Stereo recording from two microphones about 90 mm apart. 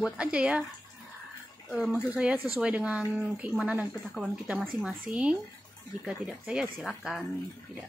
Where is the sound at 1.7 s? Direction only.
10° right (ahead or behind).